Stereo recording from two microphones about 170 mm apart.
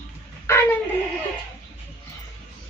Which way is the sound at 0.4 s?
15° left (ahead or behind).